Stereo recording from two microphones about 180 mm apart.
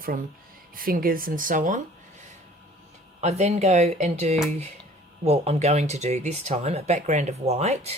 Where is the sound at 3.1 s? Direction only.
35° right (ahead or behind).